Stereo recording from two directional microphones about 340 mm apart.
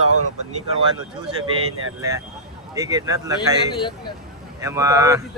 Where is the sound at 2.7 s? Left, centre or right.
Centre.